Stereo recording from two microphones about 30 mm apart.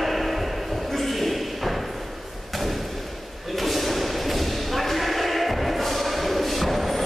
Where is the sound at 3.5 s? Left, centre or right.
Centre.